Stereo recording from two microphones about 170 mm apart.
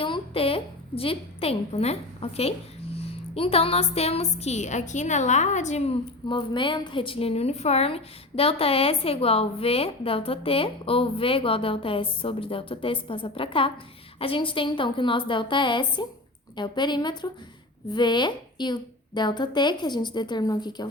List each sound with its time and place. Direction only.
0.0 s a woman's voice: 30° left (ahead or behind)